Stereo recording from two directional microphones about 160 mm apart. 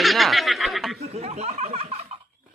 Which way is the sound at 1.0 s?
40° right (ahead or behind).